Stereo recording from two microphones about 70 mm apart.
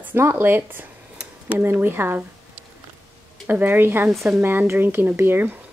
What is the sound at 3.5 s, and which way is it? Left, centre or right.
Speech, right.